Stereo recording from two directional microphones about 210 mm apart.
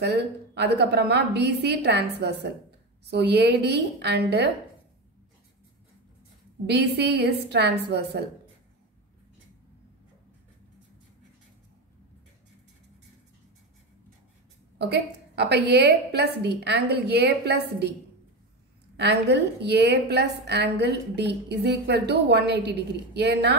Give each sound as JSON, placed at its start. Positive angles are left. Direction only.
{"t": 0.0, "sound": "a woman's voice", "side_deg": -55}
{"t": 6.6, "sound": "a woman's voice", "side_deg": -50}
{"t": 14.8, "sound": "a woman's voice", "side_deg": -50}
{"t": 19.2, "sound": "a woman's voice", "side_deg": -55}